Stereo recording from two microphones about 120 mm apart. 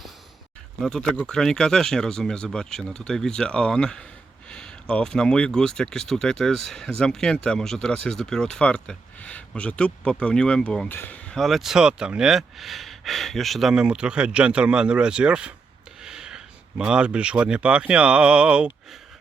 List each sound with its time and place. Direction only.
0.8 s speech: 5° left (ahead or behind)